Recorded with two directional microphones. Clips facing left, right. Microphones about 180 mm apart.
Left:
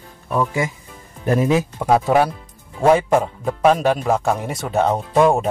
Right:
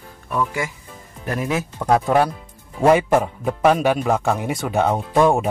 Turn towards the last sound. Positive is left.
turn(degrees=0)  # may be behind; listen again after turning